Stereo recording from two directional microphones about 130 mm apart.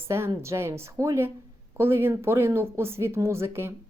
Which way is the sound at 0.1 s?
20° right (ahead or behind).